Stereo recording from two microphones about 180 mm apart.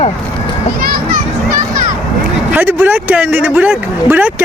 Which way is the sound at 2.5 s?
10° right (ahead or behind).